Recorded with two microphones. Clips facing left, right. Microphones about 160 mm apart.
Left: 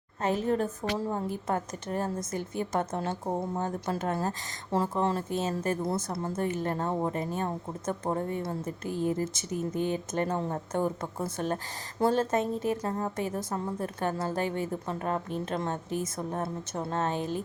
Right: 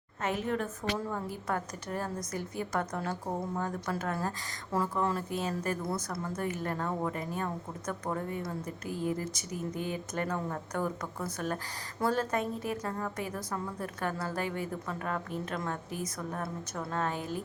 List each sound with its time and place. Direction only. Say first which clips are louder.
0.2 s speech: left 5 dB; 35° left (ahead or behind)